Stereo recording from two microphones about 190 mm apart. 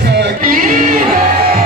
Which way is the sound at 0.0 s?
60° right (ahead or behind).